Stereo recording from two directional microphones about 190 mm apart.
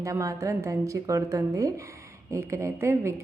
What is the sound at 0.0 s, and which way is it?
Speech, 15° right (ahead or behind).